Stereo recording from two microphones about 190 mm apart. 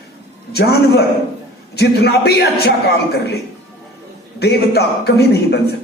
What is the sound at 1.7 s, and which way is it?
A man's voice, 60° left (ahead or behind).